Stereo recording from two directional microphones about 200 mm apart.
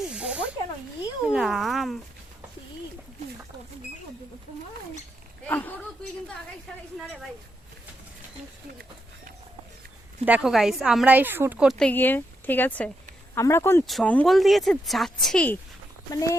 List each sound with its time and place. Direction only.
0.0 s snake: 5° right (ahead or behind)
1.3 s speech: centre (ahead or behind)
5.5 s speech: 10° left (ahead or behind)
10.2 s a woman's voice: 5° right (ahead or behind)
16.1 s speech: 15° left (ahead or behind)